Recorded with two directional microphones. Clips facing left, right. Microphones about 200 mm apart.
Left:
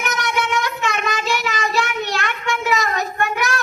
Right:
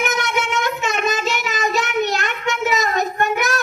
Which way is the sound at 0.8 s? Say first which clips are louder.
Right 1 dB; 20° right (ahead or behind).